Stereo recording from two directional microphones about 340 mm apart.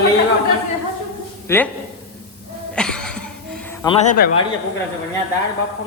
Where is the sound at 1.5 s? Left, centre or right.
Centre.